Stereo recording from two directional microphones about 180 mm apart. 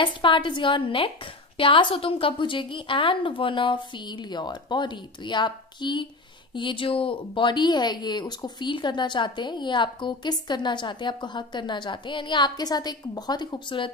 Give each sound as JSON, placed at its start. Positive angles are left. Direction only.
{"t": 0.0, "sound": "speech", "side_deg": 25}